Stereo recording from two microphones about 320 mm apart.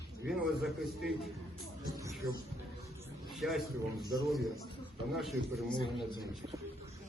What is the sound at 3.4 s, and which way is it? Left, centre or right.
Speech, centre.